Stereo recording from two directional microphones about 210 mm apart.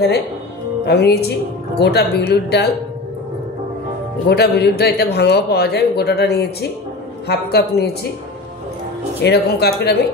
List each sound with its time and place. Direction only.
0.8 s a man's voice: 50° left (ahead or behind)
4.3 s a man's voice: 50° left (ahead or behind)
9.2 s a man's voice: 50° left (ahead or behind)